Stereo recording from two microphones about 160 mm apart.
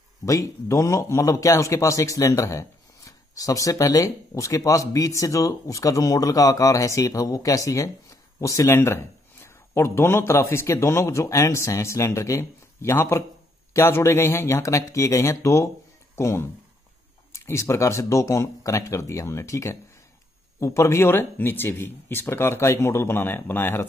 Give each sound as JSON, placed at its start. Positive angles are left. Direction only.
{"t": 0.2, "sound": "speech", "side_deg": 20}